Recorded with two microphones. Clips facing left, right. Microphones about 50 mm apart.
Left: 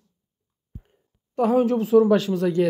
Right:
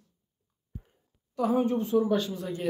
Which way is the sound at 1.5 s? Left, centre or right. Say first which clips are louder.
Left 9 dB; left.